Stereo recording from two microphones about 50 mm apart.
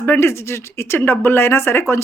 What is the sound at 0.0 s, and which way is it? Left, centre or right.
A woman's voice, left.